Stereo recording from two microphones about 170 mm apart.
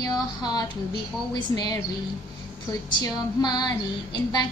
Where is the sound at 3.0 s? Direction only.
25° left (ahead or behind).